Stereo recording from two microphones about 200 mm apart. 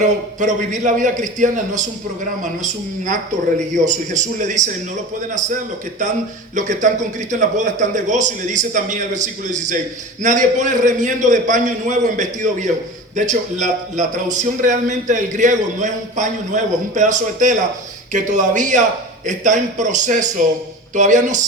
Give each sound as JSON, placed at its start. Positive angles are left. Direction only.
{"t": 0.0, "sound": "a man's voice", "side_deg": -40}
{"t": 3.8, "sound": "a man's voice", "side_deg": -40}